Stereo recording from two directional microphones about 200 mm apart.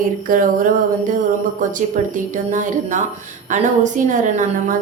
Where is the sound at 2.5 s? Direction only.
40° right (ahead or behind).